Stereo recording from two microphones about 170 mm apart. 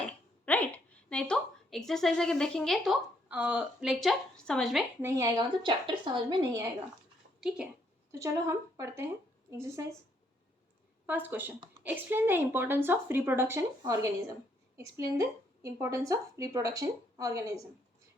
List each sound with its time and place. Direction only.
0.0 s a sound: 10° left (ahead or behind)
3.3 s a woman's voice: 10° right (ahead or behind)
5.0 s a woman's voice: 20° right (ahead or behind)
7.4 s a woman's voice: 5° right (ahead or behind)
8.1 s speech: 20° right (ahead or behind)
11.0 s a woman's voice: 10° right (ahead or behind)